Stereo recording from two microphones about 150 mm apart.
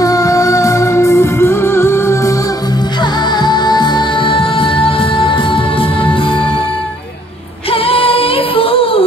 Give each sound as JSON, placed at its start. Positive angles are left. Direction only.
{"t": 0.0, "sound": "music", "side_deg": 20}
{"t": 3.0, "sound": "music", "side_deg": 30}
{"t": 7.7, "sound": "music", "side_deg": 40}